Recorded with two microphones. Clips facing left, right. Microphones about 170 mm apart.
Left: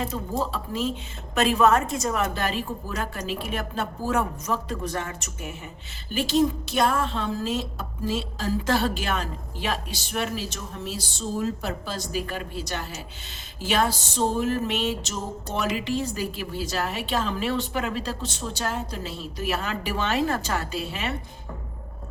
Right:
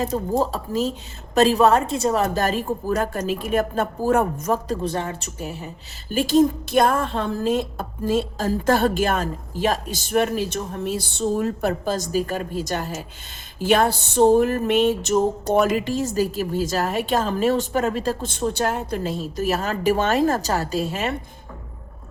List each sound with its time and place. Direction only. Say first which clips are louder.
0.0 s a woman's voice: right 6 dB; 40° right (ahead or behind)
4.8 s a woman's voice: right 5 dB; 30° right (ahead or behind)